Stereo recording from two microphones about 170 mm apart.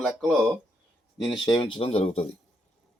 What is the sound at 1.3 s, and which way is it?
Speech, 25° left (ahead or behind).